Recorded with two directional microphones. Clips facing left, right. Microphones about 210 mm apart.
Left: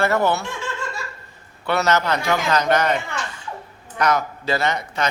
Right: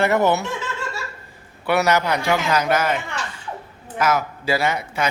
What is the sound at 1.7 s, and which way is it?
A man's voice, 10° right (ahead or behind).